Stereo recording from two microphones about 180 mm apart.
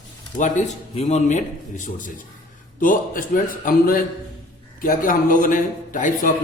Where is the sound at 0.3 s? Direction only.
40° left (ahead or behind).